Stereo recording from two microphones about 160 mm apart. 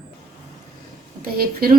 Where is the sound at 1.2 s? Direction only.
70° right (ahead or behind).